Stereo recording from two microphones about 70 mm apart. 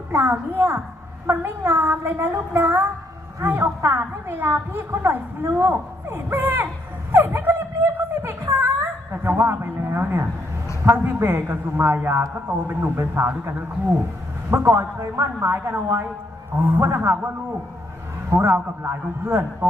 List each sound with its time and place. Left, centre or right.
0.1 s a woman's voice: right
14.5 s a woman's voice: right
18.8 s a woman's voice: right